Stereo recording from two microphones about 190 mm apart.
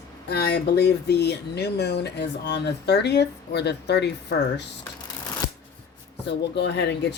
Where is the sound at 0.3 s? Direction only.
60° left (ahead or behind).